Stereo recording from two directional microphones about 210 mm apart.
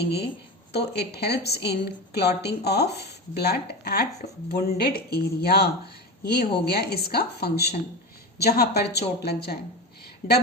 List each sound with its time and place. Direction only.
0.0 s a woman's voice: 50° left (ahead or behind)